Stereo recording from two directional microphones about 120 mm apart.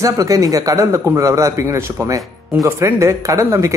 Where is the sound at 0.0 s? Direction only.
30° right (ahead or behind).